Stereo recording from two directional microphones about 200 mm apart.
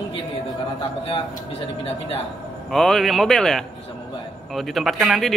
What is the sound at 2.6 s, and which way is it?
Speech, centre (ahead or behind).